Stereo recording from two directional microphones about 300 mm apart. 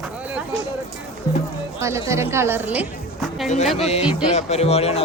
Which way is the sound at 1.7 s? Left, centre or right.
Centre.